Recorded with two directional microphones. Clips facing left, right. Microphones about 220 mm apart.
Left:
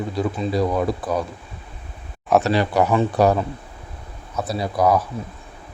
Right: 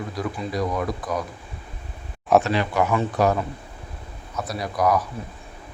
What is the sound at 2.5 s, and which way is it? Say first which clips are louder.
Speech: left 4 dB; 35° left (ahead or behind).